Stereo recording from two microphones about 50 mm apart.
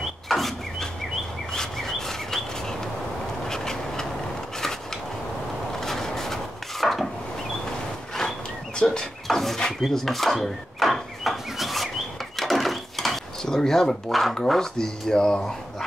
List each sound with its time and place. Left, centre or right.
0.3 s a sound: centre
1.5 s bird: centre
3.4 s vehicle: centre
5.7 s wood: centre
8.1 s walk: centre
8.7 s a sound: centre
9.3 s a sound: centre
12.4 s drawer open or close: centre
14.5 s speech: centre